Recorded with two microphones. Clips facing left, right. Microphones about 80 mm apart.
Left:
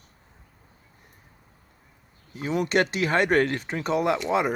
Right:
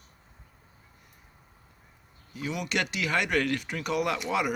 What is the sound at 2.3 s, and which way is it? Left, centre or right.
Speech, left.